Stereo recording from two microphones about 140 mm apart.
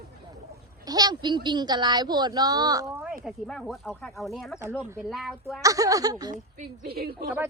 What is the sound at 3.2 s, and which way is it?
Speech, centre (ahead or behind).